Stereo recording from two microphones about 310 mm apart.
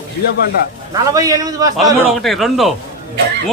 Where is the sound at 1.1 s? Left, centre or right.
Centre.